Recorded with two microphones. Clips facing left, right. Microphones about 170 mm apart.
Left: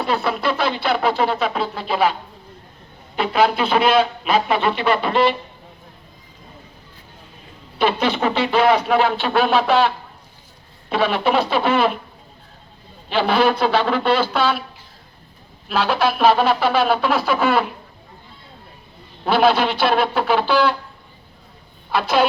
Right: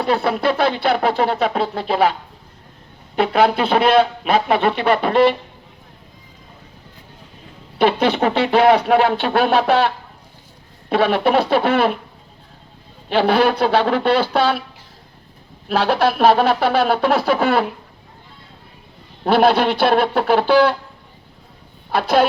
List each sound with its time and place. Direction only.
0.3 s speech: 55° right (ahead or behind)
3.2 s speech: 60° right (ahead or behind)
7.8 s speech: 60° right (ahead or behind)
13.1 s speech: 60° right (ahead or behind)
15.7 s speech: 60° right (ahead or behind)
19.2 s speech: 60° right (ahead or behind)
21.9 s speech: 55° right (ahead or behind)